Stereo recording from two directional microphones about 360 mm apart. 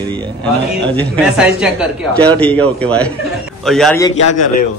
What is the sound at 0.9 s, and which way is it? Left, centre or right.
Speech, centre.